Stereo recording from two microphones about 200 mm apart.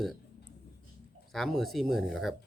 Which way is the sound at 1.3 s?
Centre (ahead or behind).